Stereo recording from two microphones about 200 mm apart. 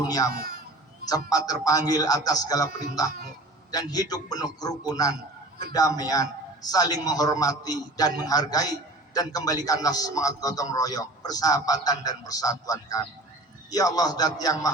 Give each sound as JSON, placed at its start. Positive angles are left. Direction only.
{"t": 0.3, "sound": "a man's voice", "side_deg": -45}
{"t": 1.3, "sound": "a man's voice", "side_deg": 20}